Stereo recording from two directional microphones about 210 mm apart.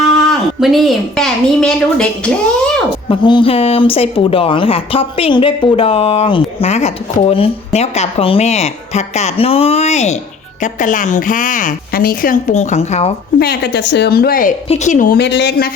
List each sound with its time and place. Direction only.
0.3 s a woman's voice: centre (ahead or behind)
3.1 s speech: 25° left (ahead or behind)
13.4 s a woman's voice: 50° left (ahead or behind)